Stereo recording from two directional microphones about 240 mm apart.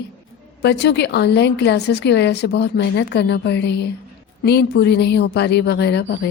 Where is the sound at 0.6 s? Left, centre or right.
Left.